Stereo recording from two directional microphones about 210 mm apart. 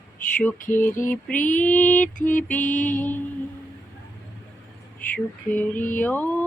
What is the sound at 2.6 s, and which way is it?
Mantra, 40° left (ahead or behind).